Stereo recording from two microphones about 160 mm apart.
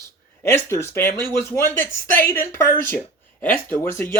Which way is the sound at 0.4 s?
15° left (ahead or behind).